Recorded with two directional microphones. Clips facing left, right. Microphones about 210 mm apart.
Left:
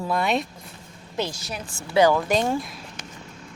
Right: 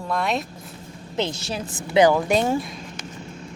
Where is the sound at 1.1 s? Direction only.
25° right (ahead or behind); by 2.8 s centre (ahead or behind).